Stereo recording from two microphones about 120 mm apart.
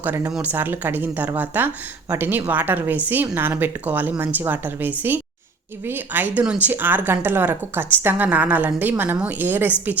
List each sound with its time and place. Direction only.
0.0 s speech: 15° right (ahead or behind)